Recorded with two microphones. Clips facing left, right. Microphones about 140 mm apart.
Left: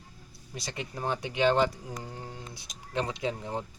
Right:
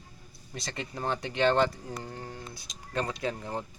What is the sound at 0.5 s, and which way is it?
Speech, 10° left (ahead or behind).